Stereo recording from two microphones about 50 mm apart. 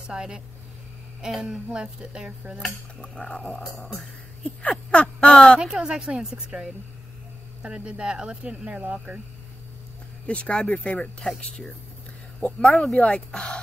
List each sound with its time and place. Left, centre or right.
0.0 s a woman's voice: centre
2.6 s speech: centre
4.6 s fowl: left
5.6 s a woman's voice: centre
10.2 s speech: left